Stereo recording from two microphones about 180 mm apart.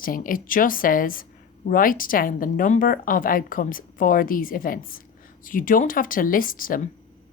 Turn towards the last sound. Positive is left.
turn(degrees=50)  # may be behind; listen again after turning